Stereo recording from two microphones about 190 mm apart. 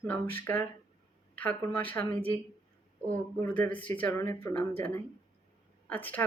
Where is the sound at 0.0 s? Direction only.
10° left (ahead or behind).